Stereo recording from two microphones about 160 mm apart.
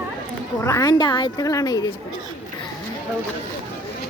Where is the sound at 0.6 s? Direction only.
20° left (ahead or behind).